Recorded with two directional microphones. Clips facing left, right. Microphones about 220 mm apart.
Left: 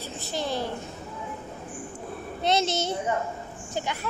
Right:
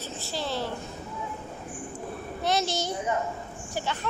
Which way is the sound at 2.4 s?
20° left (ahead or behind).